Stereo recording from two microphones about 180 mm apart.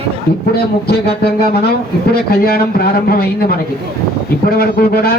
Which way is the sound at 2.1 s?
60° left (ahead or behind).